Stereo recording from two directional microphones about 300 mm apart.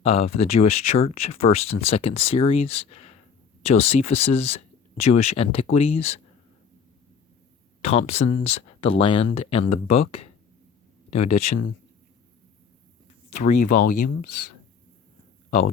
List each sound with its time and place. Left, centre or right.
0.0 s speech: centre
7.8 s speech: left
11.3 s speech: left
13.5 s speech: left
14.3 s speech: left
15.4 s speech: left